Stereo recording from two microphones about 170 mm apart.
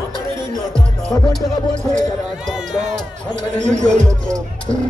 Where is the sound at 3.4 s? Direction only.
45° right (ahead or behind).